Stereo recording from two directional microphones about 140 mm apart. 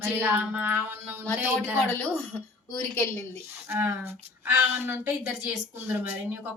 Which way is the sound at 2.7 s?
15° left (ahead or behind).